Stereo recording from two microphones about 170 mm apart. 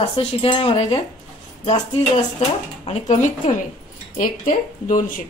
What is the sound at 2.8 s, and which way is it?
Speech, 45° left (ahead or behind).